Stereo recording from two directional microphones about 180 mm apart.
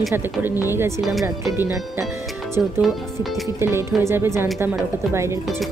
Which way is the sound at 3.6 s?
15° right (ahead or behind).